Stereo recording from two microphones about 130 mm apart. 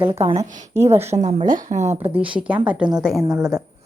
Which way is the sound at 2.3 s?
10° right (ahead or behind).